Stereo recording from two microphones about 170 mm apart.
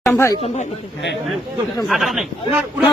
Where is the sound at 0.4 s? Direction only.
40° left (ahead or behind).